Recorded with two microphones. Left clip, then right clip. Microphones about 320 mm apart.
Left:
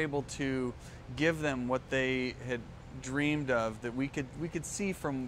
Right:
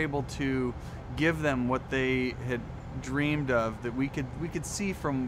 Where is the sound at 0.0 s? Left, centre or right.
Left.